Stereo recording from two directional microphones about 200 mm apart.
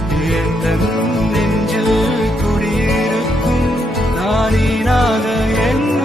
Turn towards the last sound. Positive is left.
turn(degrees=0)  # may be behind; listen again after turning